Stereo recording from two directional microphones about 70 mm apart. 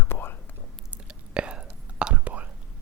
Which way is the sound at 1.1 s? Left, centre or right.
Centre.